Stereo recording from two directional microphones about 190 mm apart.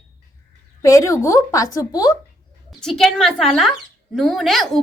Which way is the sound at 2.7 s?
Centre (ahead or behind).